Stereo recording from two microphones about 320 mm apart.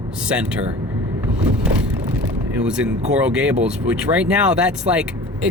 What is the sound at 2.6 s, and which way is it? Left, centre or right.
Speech, centre.